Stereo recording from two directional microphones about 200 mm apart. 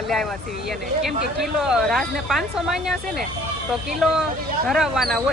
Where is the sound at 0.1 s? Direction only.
Centre (ahead or behind).